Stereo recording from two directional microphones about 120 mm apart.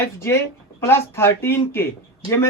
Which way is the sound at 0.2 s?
20° left (ahead or behind).